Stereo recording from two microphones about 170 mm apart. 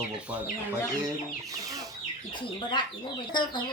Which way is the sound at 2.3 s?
30° left (ahead or behind).